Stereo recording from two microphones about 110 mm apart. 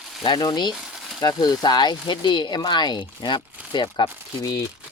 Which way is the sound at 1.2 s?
35° left (ahead or behind).